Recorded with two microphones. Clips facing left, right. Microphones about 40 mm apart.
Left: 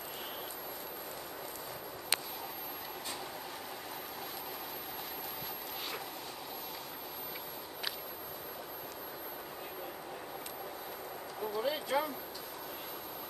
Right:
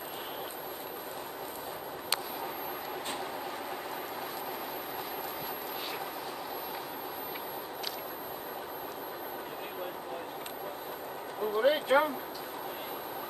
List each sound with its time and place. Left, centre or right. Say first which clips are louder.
11.5 s speech: right 8 dB; right